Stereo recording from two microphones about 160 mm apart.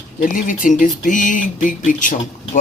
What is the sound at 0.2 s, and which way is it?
Speech, 55° left (ahead or behind).